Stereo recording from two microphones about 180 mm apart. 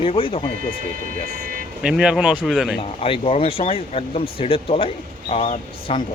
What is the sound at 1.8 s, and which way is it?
Speech, 5° right (ahead or behind).